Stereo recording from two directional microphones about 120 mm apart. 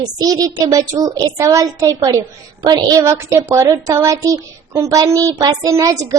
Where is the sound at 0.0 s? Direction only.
30° right (ahead or behind).